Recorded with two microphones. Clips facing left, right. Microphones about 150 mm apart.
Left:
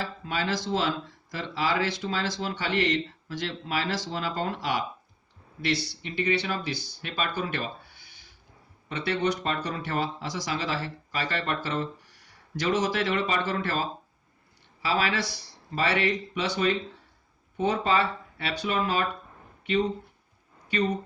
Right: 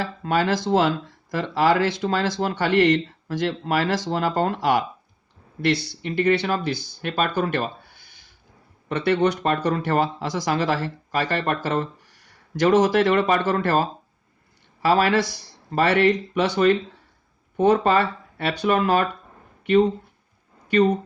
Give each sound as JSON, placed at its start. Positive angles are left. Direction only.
{"t": 0.2, "sound": "speech", "side_deg": -55}
{"t": 8.9, "sound": "speech", "side_deg": -55}